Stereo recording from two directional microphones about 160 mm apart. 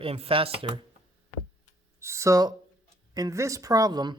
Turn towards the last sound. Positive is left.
turn(degrees=-25)  # may be behind; listen again after turning